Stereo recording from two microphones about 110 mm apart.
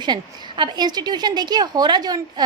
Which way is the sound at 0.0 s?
40° right (ahead or behind).